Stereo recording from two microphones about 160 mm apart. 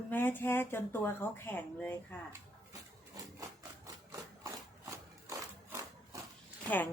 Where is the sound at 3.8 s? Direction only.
20° right (ahead or behind).